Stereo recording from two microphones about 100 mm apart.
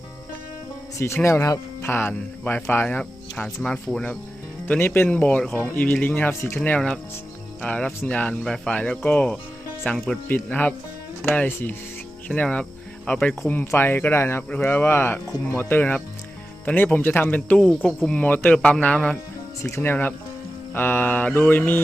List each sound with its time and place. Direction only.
0.9 s speech: 25° left (ahead or behind)